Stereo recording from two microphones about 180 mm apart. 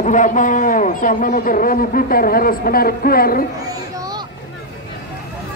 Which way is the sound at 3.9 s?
20° right (ahead or behind).